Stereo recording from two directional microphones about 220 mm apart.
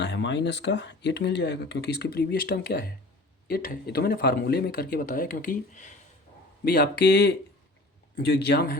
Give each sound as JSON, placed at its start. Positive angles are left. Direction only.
{"t": 0.0, "sound": "speech", "side_deg": 55}